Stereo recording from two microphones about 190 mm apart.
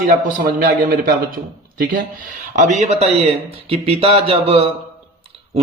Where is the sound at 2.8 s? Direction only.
35° right (ahead or behind).